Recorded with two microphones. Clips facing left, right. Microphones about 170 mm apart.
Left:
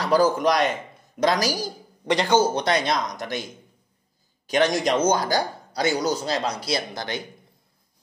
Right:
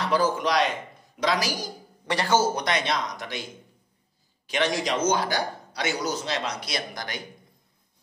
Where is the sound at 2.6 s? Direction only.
40° left (ahead or behind).